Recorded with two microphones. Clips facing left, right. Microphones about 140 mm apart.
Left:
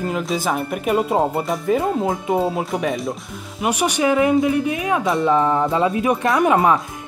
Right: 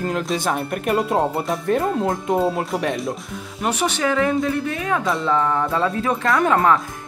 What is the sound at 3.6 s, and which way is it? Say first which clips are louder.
Speech: left 3 dB; 15° left (ahead or behind).